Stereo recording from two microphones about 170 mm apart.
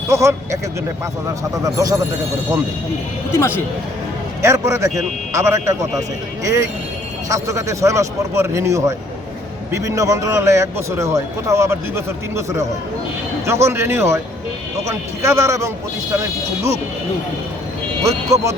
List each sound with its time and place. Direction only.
0.1 s a man's voice: 15° right (ahead or behind)
1.6 s speech: 20° right (ahead or behind)
3.3 s speech: 15° left (ahead or behind)
4.4 s a man's voice: 15° right (ahead or behind)
13.7 s a man's voice: 15° right (ahead or behind)
18.0 s a man's voice: 20° right (ahead or behind)